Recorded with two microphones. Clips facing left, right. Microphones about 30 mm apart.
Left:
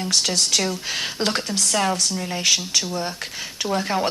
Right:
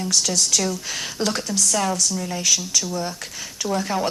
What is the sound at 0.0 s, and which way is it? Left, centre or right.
Speech, left.